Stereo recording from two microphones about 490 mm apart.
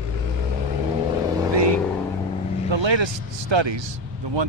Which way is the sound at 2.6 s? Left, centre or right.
Right.